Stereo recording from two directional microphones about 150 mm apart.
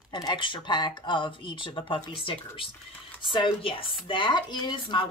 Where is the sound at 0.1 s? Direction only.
30° left (ahead or behind).